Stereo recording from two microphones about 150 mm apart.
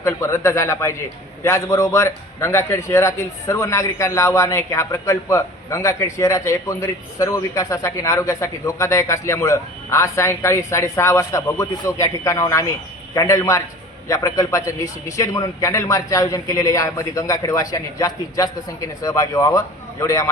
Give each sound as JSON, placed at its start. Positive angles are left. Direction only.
{"t": 0.0, "sound": "a man's voice", "side_deg": 20}